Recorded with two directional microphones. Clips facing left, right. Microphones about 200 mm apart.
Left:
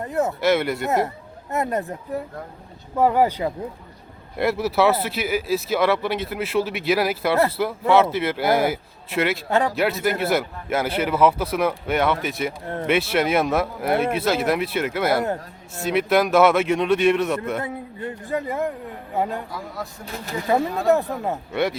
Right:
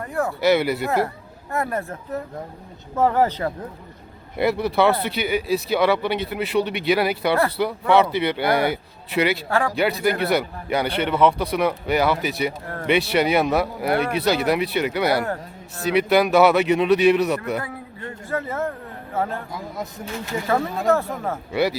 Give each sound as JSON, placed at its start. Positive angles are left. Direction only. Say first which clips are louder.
{"t": 0.0, "sound": "speech", "louder": "left 2 dB", "side_deg": 20}
{"t": 0.4, "sound": "speech", "louder": "right 4 dB", "side_deg": 0}
{"t": 1.5, "sound": "a man's voice", "louder": "left 1 dB", "side_deg": 20}
{"t": 9.5, "sound": "speech", "louder": "left 1 dB", "side_deg": 20}
{"t": 9.7, "sound": "speech", "louder": "right 1 dB", "side_deg": 0}
{"t": 17.6, "sound": "a man's voice", "louder": "left 3 dB", "side_deg": 15}
{"t": 19.5, "sound": "speech", "louder": "right 1 dB", "side_deg": -20}
{"t": 20.8, "sound": "a man's voice", "louder": "left 1 dB", "side_deg": 20}
{"t": 21.5, "sound": "speech", "louder": "right 2 dB", "side_deg": 0}